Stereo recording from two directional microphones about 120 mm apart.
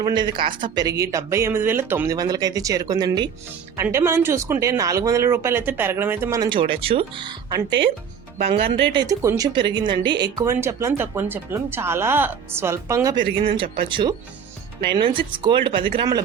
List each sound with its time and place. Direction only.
0.0 s speech: 40° right (ahead or behind); by 2.0 s 20° right (ahead or behind)
2.0 s speech: 30° right (ahead or behind)
3.9 s speech: 20° right (ahead or behind)
6.4 s speech: 45° right (ahead or behind)
8.4 s speech: 50° right (ahead or behind)
9.0 s speech: 25° right (ahead or behind)
9.5 s speech: 40° right (ahead or behind); by 13.1 s 25° right (ahead or behind)
13.1 s speech: 45° right (ahead or behind)